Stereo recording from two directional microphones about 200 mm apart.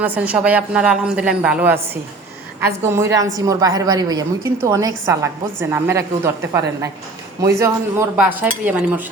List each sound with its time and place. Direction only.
0.0 s a woman's voice: 10° right (ahead or behind)